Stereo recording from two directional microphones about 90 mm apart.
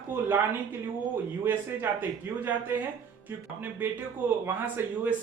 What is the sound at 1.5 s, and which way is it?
Speech, 25° right (ahead or behind).